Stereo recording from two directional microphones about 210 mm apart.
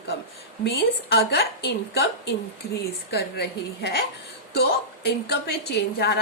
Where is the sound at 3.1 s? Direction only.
50° left (ahead or behind).